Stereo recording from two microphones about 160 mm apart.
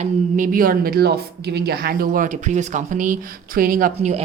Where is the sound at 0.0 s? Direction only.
55° right (ahead or behind).